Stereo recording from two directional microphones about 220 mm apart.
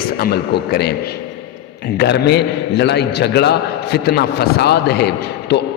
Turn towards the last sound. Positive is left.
turn(degrees=50)  # may be behind; listen again after turning